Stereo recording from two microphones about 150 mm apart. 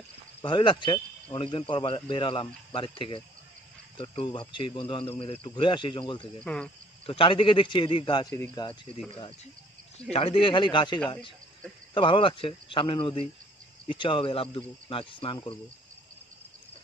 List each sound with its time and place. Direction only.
0.4 s speech: 30° left (ahead or behind)
6.4 s cricket: 5° left (ahead or behind)
7.1 s speech: 35° left (ahead or behind)
10.1 s speech: 40° left (ahead or behind)